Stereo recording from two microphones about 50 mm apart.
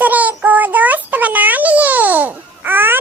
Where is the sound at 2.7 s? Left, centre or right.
Right.